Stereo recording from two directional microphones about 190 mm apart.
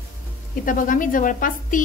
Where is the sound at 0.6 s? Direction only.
45° left (ahead or behind).